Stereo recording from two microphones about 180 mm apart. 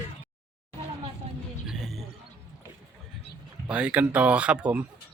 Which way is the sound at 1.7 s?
Centre (ahead or behind).